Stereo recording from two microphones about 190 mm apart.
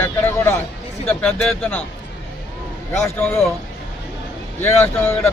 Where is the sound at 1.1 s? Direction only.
5° left (ahead or behind).